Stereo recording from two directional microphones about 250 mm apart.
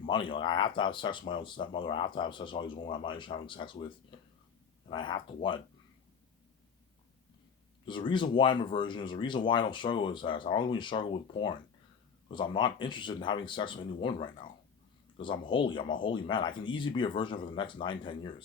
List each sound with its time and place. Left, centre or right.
0.1 s speech: centre
7.9 s speech: centre